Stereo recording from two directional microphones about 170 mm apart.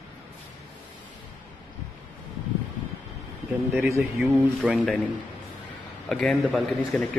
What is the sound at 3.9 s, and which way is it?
Speech, 10° right (ahead or behind).